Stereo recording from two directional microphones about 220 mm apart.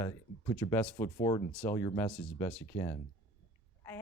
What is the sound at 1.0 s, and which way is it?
Speech, 25° left (ahead or behind).